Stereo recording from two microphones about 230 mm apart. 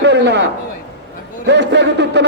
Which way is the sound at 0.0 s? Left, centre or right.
Right.